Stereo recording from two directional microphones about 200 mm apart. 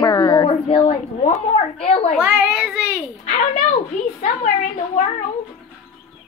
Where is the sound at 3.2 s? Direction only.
40° left (ahead or behind).